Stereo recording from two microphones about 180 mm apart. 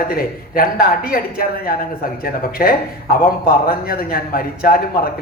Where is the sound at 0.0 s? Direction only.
55° left (ahead or behind).